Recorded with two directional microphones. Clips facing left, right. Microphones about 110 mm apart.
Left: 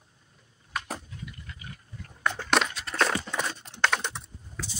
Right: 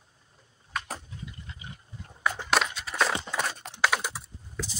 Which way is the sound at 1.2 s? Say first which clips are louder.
Even; 25° right (ahead or behind).